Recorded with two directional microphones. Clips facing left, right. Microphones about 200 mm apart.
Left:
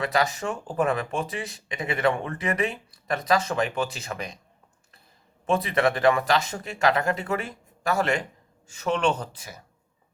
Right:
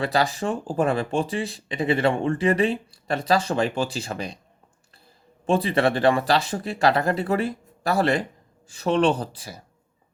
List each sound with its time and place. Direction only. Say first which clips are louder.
0.0 s speech: right 2 dB; 30° right (ahead or behind)
5.5 s speech: right 2 dB; 30° right (ahead or behind)